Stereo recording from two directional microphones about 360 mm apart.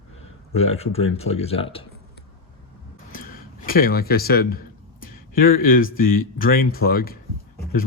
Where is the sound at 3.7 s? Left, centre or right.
Left.